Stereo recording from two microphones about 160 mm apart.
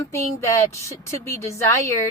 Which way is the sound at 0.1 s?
20° left (ahead or behind).